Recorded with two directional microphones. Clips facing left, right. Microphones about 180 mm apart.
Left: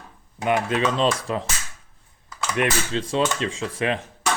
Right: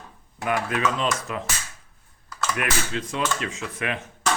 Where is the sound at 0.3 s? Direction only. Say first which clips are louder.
Left 4 dB; 20° left (ahead or behind).